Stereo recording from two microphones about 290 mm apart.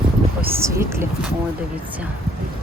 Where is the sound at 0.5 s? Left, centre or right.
Centre.